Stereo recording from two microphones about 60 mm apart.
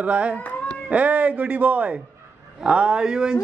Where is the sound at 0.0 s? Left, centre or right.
Right.